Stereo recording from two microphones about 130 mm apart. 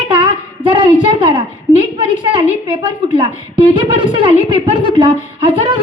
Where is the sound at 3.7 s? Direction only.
40° right (ahead or behind).